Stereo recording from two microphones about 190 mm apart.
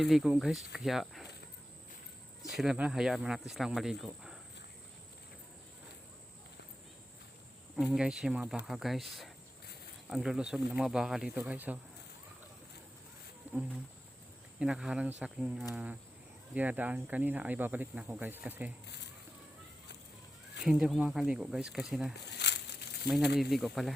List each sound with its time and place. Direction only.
0.0 s speech: centre (ahead or behind)
2.4 s speech: centre (ahead or behind)
7.8 s speech: 5° right (ahead or behind)
13.5 s insect: 10° right (ahead or behind)
14.6 s speech: 5° right (ahead or behind)
20.7 s speech: 5° right (ahead or behind)
22.2 s crumpling: 60° left (ahead or behind)
23.0 s speech: centre (ahead or behind)